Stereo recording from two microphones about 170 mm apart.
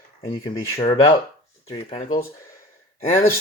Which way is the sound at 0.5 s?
30° left (ahead or behind).